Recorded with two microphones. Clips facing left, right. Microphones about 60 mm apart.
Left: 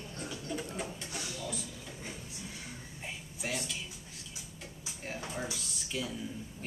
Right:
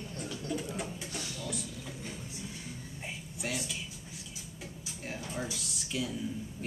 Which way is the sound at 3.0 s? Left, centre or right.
Centre.